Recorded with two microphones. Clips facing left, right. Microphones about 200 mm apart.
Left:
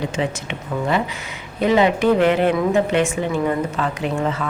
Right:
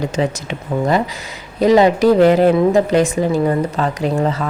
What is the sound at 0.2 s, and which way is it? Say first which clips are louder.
Speech: right 5 dB; 35° right (ahead or behind).